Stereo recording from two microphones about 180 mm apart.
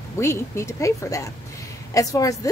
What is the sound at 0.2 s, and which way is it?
A woman's voice, 15° left (ahead or behind).